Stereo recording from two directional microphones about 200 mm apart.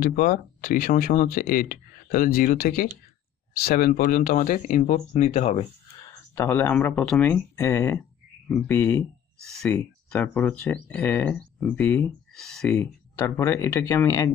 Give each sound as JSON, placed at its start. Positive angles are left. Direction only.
{"t": 0.0, "sound": "speech", "side_deg": 45}
{"t": 6.3, "sound": "speech", "side_deg": 15}
{"t": 13.4, "sound": "speech", "side_deg": 15}